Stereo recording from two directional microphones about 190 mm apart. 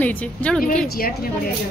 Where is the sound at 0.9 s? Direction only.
55° left (ahead or behind).